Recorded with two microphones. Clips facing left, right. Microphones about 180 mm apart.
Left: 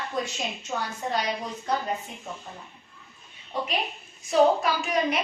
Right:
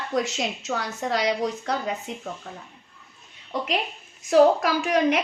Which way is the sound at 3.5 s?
85° right.